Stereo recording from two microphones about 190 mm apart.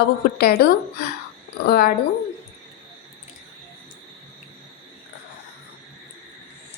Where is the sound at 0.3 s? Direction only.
55° left (ahead or behind).